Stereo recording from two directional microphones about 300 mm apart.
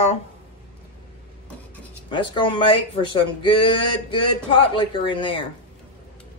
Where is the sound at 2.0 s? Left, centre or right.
Centre.